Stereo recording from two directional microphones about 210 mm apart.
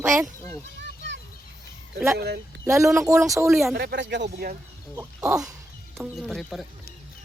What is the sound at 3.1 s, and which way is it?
Speech, 15° right (ahead or behind).